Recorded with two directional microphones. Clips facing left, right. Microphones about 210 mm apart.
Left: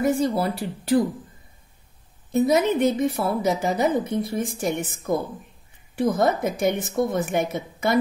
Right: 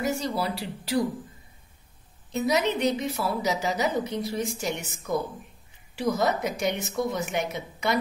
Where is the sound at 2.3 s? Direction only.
50° left (ahead or behind).